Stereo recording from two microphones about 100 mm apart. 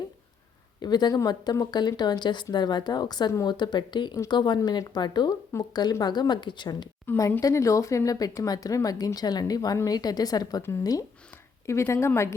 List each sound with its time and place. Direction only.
0.8 s speech: 45° left (ahead or behind)
7.2 s speech: 30° left (ahead or behind)
11.6 s speech: 30° left (ahead or behind)